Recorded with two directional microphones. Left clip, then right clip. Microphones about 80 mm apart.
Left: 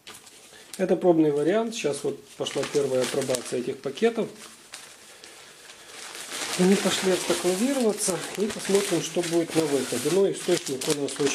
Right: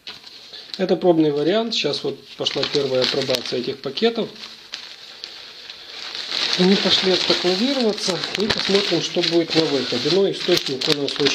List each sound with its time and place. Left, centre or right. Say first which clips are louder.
0.7 s speech: right 4 dB; centre
3.5 s speech: right 4 dB; centre
4.0 s speech: right 4 dB; centre
6.6 s speech: right 5 dB; centre
8.1 s speech: right 6 dB; right
8.7 s speech: right 1 dB; centre
9.7 s speech: right 5 dB; centre